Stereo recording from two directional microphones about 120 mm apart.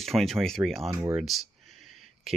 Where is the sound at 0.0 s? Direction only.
Centre (ahead or behind).